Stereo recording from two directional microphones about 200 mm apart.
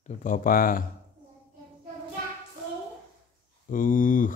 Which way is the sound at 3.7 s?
40° left (ahead or behind).